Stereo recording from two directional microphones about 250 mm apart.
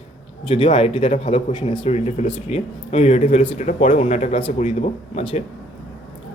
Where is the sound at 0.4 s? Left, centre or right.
Left.